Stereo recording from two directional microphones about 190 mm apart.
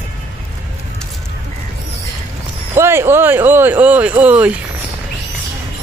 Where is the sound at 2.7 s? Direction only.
15° right (ahead or behind).